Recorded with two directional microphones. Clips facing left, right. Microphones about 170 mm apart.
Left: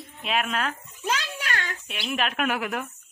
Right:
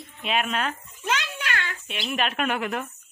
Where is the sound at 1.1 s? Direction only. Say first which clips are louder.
Even; 35° left (ahead or behind).